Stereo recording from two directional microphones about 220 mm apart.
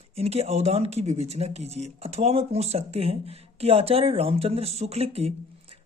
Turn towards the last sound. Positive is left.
turn(degrees=-25)  # may be behind; listen again after turning